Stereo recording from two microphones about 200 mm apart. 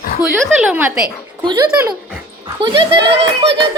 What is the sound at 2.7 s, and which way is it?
Speech, 60° right (ahead or behind).